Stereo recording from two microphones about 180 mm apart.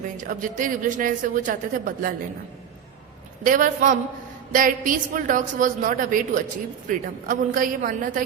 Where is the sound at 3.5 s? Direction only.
45° right (ahead or behind).